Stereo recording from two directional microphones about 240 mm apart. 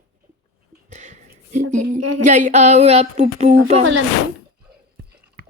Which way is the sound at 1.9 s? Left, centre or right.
Right.